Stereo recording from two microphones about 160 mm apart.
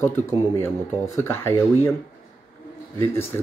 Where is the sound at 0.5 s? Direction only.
15° left (ahead or behind).